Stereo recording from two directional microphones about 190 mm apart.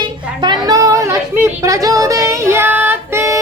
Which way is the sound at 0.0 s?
20° right (ahead or behind).